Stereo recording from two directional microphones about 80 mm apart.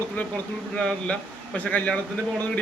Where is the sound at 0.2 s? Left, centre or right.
Left.